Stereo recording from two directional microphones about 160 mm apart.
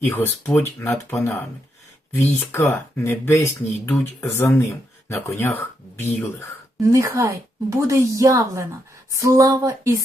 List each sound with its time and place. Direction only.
0.1 s speech: 15° left (ahead or behind)
6.9 s a woman's voice: 20° right (ahead or behind)